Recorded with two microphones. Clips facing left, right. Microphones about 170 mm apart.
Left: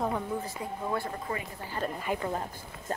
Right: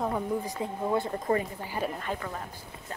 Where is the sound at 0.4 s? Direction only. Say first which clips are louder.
Right 3 dB; 20° right (ahead or behind).